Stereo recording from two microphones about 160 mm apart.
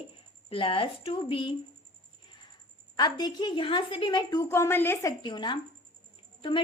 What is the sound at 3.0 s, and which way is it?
A woman's voice, 25° left (ahead or behind).